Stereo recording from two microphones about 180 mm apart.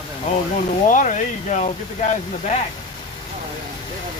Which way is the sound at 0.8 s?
45° left (ahead or behind).